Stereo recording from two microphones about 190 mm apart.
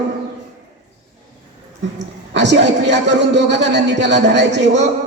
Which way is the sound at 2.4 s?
65° right (ahead or behind).